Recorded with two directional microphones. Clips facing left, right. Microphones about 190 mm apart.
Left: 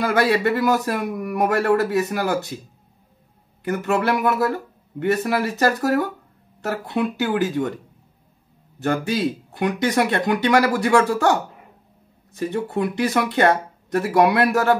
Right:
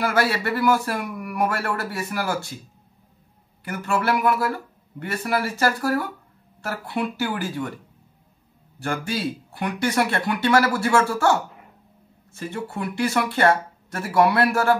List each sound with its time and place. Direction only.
0.0 s a man's voice: 20° left (ahead or behind)
3.6 s a man's voice: 20° left (ahead or behind)
8.7 s a man's voice: 20° left (ahead or behind)